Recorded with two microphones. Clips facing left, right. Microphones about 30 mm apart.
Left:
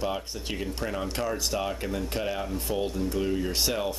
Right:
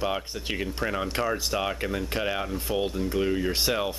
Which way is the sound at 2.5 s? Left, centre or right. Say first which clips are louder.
Right 1 dB; centre.